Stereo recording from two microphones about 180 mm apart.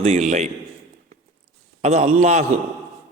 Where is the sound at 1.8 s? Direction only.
40° right (ahead or behind).